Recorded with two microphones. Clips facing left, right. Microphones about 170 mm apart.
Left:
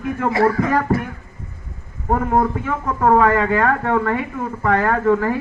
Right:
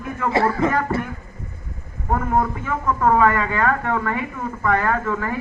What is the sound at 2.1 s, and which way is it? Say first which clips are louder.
Speech: left 3 dB; 45° left (ahead or behind).